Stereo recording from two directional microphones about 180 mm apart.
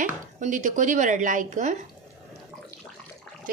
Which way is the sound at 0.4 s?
45° right (ahead or behind).